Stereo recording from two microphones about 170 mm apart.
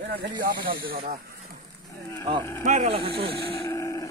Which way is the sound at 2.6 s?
40° right (ahead or behind).